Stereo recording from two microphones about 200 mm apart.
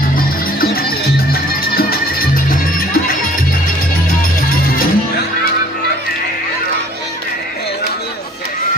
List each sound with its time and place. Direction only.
0.2 s music: 50° left (ahead or behind)
4.4 s music: 45° left (ahead or behind)